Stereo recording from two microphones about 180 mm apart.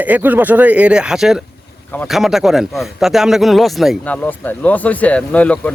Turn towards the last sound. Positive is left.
turn(degrees=5)  # may be behind; listen again after turning